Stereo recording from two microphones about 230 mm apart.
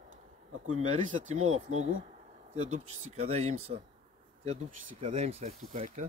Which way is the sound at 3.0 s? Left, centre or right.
Right.